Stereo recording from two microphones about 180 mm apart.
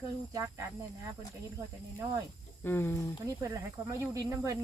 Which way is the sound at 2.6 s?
10° left (ahead or behind).